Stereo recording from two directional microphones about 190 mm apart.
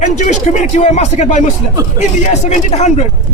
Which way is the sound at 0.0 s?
40° left (ahead or behind).